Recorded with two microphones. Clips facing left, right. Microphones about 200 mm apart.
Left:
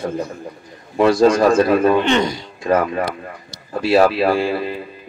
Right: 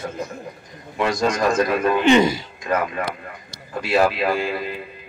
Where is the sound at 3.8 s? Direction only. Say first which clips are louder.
Left 5 dB; 30° left (ahead or behind).